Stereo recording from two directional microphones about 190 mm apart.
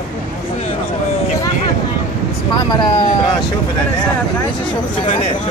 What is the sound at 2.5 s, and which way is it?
Speech, 25° left (ahead or behind).